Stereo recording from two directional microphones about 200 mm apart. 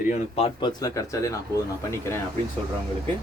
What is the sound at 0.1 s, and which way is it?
Speech, 30° left (ahead or behind).